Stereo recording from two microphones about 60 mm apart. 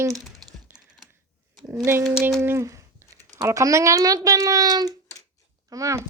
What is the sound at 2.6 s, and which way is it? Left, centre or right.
Speech, right.